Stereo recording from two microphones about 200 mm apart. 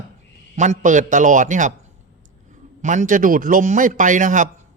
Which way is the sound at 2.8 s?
40° right (ahead or behind).